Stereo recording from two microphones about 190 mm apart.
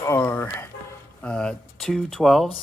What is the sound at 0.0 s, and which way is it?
Music, 10° left (ahead or behind).